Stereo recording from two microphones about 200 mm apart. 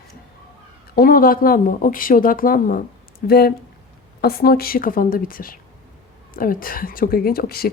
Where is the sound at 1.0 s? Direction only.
45° left (ahead or behind).